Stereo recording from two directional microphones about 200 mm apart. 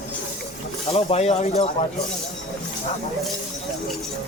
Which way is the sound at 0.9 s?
30° left (ahead or behind).